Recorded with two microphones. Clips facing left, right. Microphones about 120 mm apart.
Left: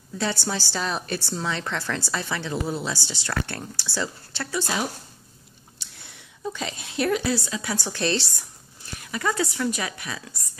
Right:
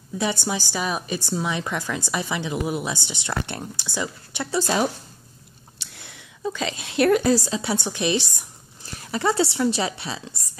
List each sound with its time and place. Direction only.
0.2 s a woman's voice: 15° right (ahead or behind)
4.5 s speech: 40° right (ahead or behind)
5.8 s a sound: 75° right (ahead or behind)
6.5 s speech: 90° right
7.1 s a woman's voice: 45° right (ahead or behind); by 8.5 s 15° right (ahead or behind)
8.8 s speech: 30° right (ahead or behind)